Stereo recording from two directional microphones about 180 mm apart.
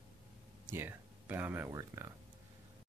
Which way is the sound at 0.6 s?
10° right (ahead or behind).